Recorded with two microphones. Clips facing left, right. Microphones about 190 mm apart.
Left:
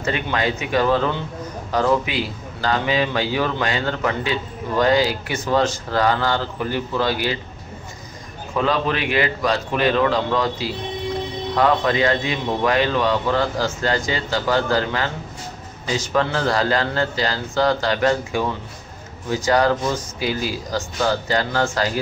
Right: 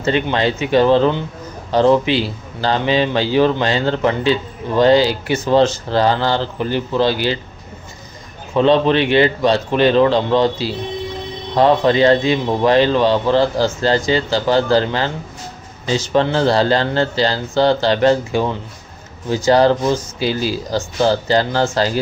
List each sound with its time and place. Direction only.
0.0 s a man's voice: 30° right (ahead or behind)
8.5 s a man's voice: 30° right (ahead or behind)